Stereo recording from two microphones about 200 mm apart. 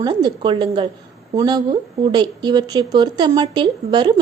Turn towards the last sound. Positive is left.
turn(degrees=-25)  # may be behind; listen again after turning